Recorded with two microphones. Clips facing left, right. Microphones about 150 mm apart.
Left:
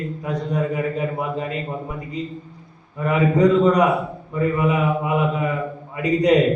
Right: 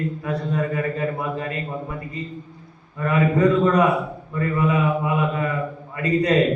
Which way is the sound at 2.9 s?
15° left (ahead or behind).